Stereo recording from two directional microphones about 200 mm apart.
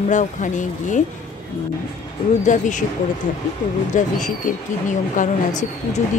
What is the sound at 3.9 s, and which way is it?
A woman's voice, 40° left (ahead or behind).